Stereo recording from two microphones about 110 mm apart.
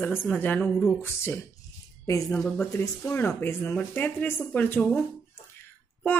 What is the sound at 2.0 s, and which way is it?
Speech, 30° left (ahead or behind).